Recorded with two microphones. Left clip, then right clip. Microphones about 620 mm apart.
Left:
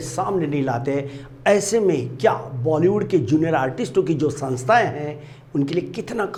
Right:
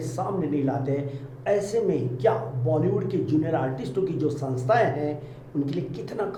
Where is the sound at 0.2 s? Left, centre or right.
Left.